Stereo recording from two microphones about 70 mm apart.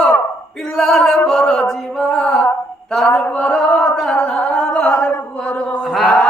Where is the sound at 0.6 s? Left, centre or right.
Centre.